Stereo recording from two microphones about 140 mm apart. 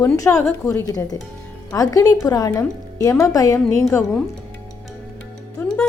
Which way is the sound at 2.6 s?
15° left (ahead or behind).